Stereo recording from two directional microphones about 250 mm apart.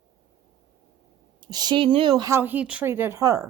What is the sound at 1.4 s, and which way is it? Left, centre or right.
A woman's voice, centre.